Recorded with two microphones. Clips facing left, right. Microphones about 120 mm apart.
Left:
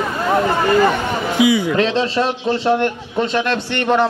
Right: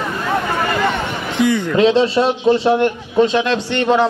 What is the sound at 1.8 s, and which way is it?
A man's voice, 15° right (ahead or behind).